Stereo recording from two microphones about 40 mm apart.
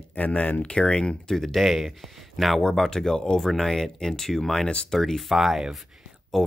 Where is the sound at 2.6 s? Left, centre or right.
Centre.